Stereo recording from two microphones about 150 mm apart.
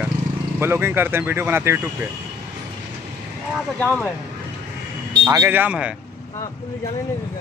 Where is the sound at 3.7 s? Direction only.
10° left (ahead or behind).